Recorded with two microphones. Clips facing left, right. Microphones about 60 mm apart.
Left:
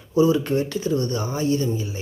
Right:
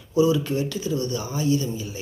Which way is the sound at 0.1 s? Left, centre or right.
Left.